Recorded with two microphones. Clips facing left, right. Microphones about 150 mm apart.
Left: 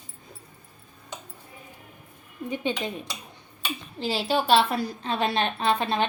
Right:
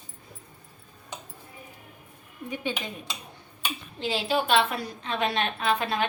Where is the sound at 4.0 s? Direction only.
35° left (ahead or behind).